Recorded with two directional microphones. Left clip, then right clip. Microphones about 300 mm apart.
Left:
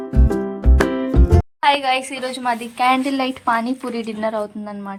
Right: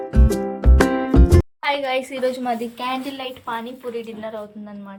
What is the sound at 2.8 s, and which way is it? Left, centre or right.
A woman's voice, centre.